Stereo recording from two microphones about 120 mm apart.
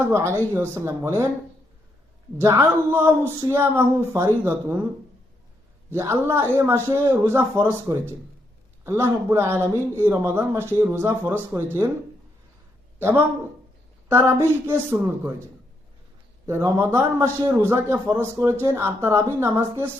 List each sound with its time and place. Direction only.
0.0 s a man's voice: 20° right (ahead or behind)
2.4 s a man's voice: 25° right (ahead or behind)
5.9 s a man's voice: 20° right (ahead or behind)
13.0 s a man's voice: 20° right (ahead or behind)
16.5 s a man's voice: 25° right (ahead or behind)